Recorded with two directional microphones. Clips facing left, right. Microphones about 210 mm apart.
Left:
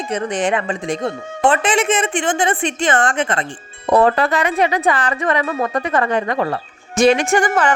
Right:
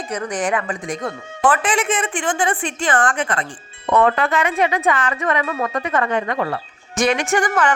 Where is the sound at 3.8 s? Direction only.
35° left (ahead or behind).